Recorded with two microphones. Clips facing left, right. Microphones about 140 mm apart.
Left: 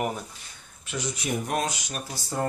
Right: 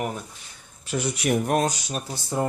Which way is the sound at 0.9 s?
65° right (ahead or behind).